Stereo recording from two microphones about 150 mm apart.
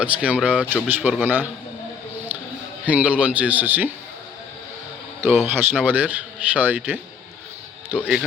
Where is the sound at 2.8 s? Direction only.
10° right (ahead or behind).